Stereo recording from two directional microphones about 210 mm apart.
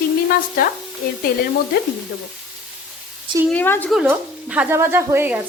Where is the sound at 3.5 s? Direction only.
10° left (ahead or behind).